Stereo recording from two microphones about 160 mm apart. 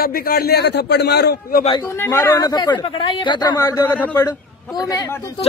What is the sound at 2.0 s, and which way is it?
A man's voice, 15° left (ahead or behind).